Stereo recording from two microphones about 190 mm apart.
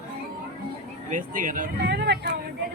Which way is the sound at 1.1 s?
45° right (ahead or behind).